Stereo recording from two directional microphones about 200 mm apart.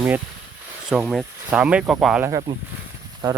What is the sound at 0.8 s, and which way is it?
Speech, centre (ahead or behind).